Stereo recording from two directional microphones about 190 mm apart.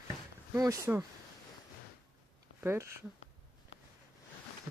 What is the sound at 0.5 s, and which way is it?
Speech, 15° right (ahead or behind).